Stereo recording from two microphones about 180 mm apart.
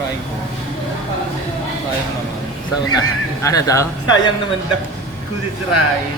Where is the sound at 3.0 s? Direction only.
20° left (ahead or behind).